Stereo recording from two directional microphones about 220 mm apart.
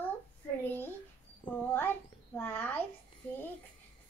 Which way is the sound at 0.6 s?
10° left (ahead or behind).